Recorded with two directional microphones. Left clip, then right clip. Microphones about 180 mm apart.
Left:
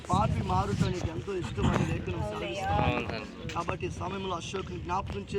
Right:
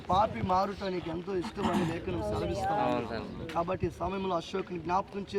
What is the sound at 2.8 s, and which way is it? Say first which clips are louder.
Speech: even; 30° right (ahead or behind).